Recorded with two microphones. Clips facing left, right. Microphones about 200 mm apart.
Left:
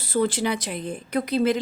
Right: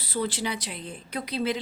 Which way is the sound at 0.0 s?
50° left (ahead or behind).